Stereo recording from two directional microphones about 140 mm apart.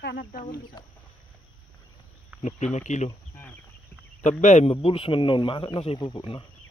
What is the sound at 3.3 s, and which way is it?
Insect, 15° left (ahead or behind).